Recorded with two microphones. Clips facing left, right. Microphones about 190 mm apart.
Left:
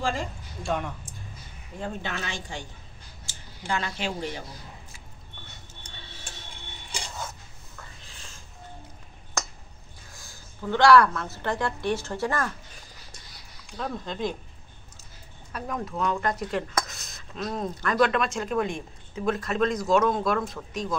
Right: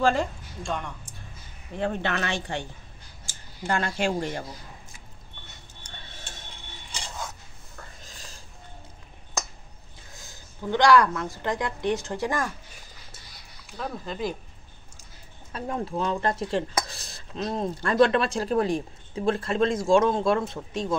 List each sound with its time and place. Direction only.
0.0 s a sound: 60° right (ahead or behind)
0.7 s speech: 5° left (ahead or behind)
1.8 s speech: 70° right (ahead or behind)
3.3 s speech: 50° right (ahead or behind)
8.0 s a sound: 40° right (ahead or behind)
10.1 s a woman's voice: 20° right (ahead or behind)
13.7 s speech: 5° right (ahead or behind)
15.5 s speech: 30° right (ahead or behind)